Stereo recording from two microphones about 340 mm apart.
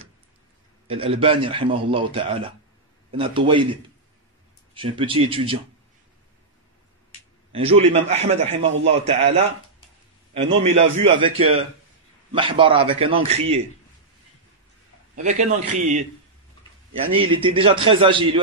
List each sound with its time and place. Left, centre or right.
0.8 s a man's voice: centre
7.5 s a man's voice: centre
15.2 s speech: right
17.1 s a man's voice: centre